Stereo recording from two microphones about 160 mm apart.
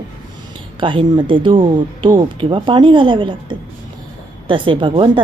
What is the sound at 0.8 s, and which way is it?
Speech, 30° right (ahead or behind).